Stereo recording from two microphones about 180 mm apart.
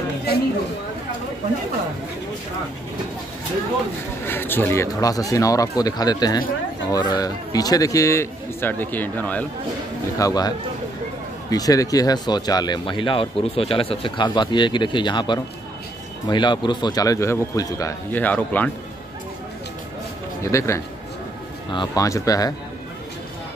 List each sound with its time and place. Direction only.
4.3 s a man's voice: 10° left (ahead or behind)
10.1 s speech: 20° left (ahead or behind)
11.5 s speech: 20° left (ahead or behind)
20.4 s a man's voice: 15° left (ahead or behind)